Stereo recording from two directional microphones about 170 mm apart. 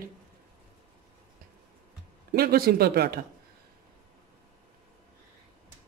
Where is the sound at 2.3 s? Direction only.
65° right (ahead or behind).